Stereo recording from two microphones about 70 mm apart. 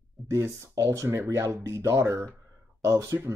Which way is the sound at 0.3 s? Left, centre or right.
Right.